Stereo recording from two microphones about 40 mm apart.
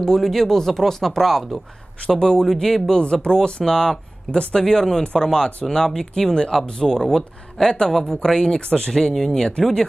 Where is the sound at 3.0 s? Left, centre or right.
Left.